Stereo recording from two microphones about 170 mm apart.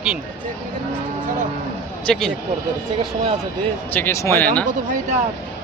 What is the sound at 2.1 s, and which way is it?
Speech, centre (ahead or behind).